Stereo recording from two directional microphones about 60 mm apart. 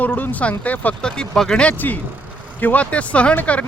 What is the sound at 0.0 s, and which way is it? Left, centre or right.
Speech, left.